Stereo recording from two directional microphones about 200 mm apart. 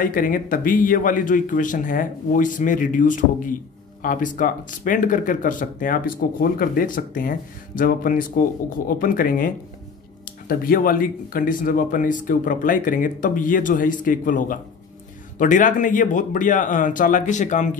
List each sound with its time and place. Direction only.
0.0 s speech: 45° left (ahead or behind)